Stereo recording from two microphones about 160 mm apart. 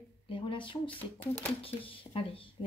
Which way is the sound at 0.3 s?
35° left (ahead or behind).